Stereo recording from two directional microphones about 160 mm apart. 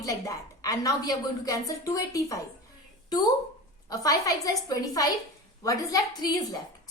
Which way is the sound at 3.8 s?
20° left (ahead or behind).